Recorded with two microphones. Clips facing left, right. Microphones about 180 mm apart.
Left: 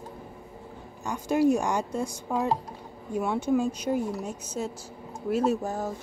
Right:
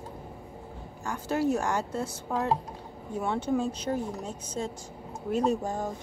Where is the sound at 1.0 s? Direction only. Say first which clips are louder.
Left 4 dB; 15° left (ahead or behind).